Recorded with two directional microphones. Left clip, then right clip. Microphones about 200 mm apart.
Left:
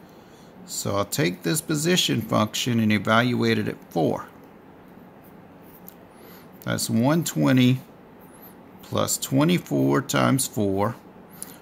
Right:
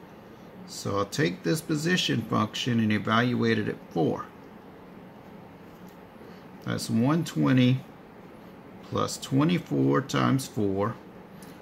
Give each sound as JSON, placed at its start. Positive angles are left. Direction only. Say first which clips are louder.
{"t": 0.8, "sound": "speech", "louder": "left 3 dB", "side_deg": 50}
{"t": 6.6, "sound": "speech", "louder": "left 4 dB", "side_deg": 50}
{"t": 9.2, "sound": "speech", "louder": "left 4 dB", "side_deg": 50}